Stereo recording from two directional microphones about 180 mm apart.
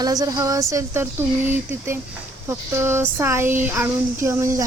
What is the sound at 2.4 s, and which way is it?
Speech, 15° right (ahead or behind).